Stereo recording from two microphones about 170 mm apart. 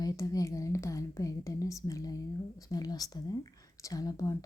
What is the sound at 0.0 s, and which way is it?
Speech, 20° left (ahead or behind).